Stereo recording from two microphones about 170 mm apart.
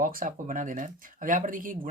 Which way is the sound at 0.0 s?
55° right (ahead or behind).